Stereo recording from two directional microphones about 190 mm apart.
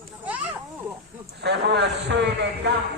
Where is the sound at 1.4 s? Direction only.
65° right (ahead or behind).